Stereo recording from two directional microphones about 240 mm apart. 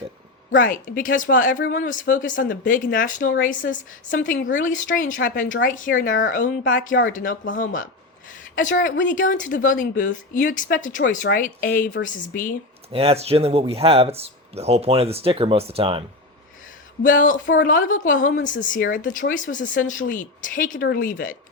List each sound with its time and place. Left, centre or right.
0.5 s a woman's voice: left
12.9 s speech: right
17.0 s a woman's voice: left